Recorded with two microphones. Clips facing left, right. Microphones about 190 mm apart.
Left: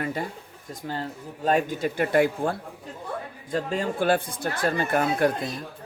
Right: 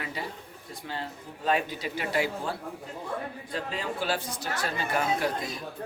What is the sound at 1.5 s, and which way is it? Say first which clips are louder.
Speech: left 5 dB; 45° left (ahead or behind).